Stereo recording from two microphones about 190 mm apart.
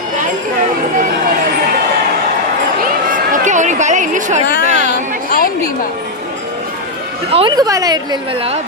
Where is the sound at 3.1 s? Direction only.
40° right (ahead or behind).